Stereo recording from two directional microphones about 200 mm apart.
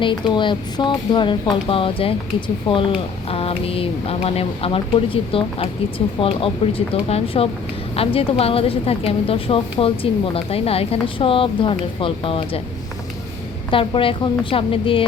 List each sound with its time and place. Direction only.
0.0 s a woman's voice: 25° left (ahead or behind)
13.7 s a woman's voice: 25° left (ahead or behind)